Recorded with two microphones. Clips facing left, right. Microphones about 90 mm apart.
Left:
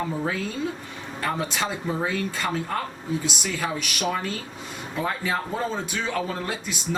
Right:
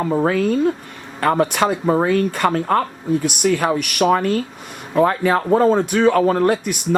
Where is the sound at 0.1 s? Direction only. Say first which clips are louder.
Right 11 dB; 60° right (ahead or behind).